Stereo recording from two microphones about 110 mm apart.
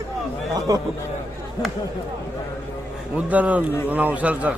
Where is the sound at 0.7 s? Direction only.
30° right (ahead or behind).